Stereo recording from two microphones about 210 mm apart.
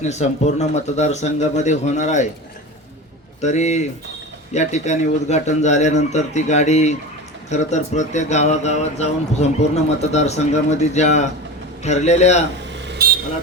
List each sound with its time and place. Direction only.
0.0 s a man's voice: 35° left (ahead or behind)
3.4 s a man's voice: 35° left (ahead or behind)
12.8 s vehicle: 55° right (ahead or behind)